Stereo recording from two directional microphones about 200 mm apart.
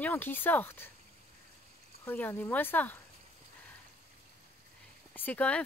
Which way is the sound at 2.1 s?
10° left (ahead or behind).